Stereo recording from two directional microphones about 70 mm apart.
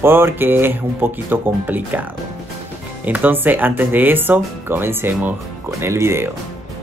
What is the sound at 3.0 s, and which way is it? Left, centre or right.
Speech, right.